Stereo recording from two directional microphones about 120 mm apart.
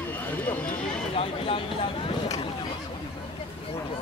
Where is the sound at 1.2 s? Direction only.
55° left (ahead or behind).